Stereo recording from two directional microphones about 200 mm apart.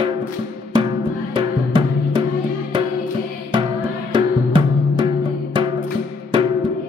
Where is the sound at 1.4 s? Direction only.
25° right (ahead or behind).